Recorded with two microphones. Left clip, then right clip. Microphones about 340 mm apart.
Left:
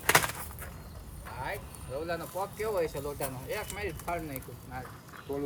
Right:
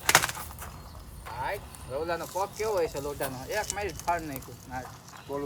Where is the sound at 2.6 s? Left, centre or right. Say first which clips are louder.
Right 2 dB; right.